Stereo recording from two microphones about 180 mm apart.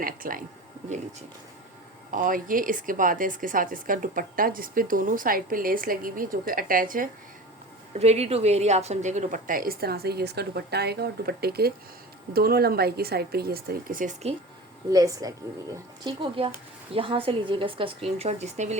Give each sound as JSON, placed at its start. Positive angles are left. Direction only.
{"t": 0.0, "sound": "a woman's voice", "side_deg": -50}
{"t": 2.0, "sound": "a woman's voice", "side_deg": -50}
{"t": 7.9, "sound": "a woman's voice", "side_deg": -35}
{"t": 14.8, "sound": "a woman's voice", "side_deg": -20}